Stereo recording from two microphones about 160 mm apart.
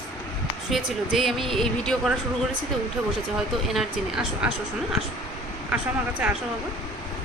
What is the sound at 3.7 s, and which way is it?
Speech, 5° right (ahead or behind).